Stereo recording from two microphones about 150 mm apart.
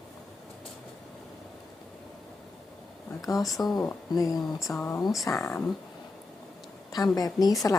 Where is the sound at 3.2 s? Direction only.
25° left (ahead or behind).